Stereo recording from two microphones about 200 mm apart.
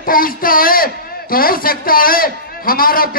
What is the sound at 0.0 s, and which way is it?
A man's voice, 45° left (ahead or behind).